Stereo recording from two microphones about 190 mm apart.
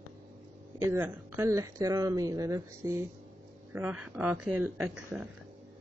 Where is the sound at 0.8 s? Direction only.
10° right (ahead or behind).